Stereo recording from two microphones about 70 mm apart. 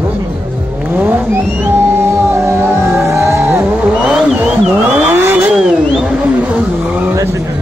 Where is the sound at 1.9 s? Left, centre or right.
Right.